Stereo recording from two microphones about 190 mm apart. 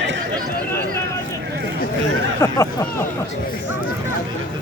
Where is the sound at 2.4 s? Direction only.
15° left (ahead or behind).